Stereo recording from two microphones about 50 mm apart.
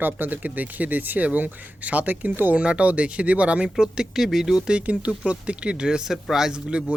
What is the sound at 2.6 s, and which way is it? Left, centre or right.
Speech, right.